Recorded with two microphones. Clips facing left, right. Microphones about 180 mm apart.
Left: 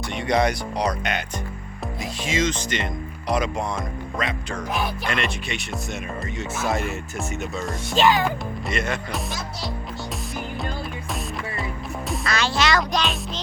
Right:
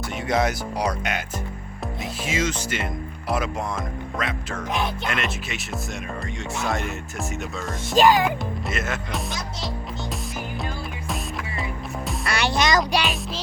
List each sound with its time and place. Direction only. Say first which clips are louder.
0.2 s speech: left 2 dB; 5° right (ahead or behind)
2.2 s speech: left 2 dB; 5° right (ahead or behind)
6.6 s speech: left 2 dB; centre (ahead or behind)
7.9 s speech: right 2 dB; 40° right (ahead or behind)
8.7 s speech: left 4 dB; centre (ahead or behind)
12.4 s music: right 2 dB; 15° right (ahead or behind)